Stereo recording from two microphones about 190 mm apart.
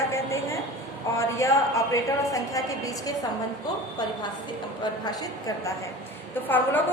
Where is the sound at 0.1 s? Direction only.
15° left (ahead or behind).